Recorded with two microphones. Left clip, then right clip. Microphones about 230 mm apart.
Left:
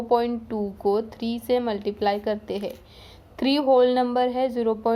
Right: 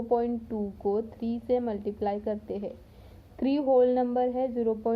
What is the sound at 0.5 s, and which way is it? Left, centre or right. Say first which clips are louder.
Speech: left 9 dB; left.